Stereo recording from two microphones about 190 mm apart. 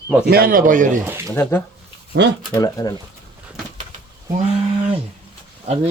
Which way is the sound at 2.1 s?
60° right (ahead or behind).